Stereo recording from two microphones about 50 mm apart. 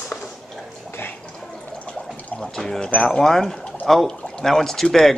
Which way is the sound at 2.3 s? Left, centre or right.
Centre.